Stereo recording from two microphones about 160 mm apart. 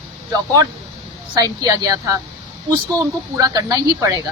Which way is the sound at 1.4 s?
20° right (ahead or behind).